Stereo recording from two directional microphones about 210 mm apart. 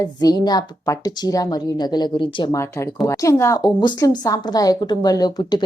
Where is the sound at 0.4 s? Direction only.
20° left (ahead or behind).